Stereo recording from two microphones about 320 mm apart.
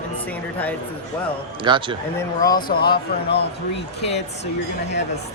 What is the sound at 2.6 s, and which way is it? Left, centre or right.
Speech, left.